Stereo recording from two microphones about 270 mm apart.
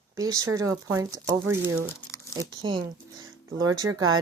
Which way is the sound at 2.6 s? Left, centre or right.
Right.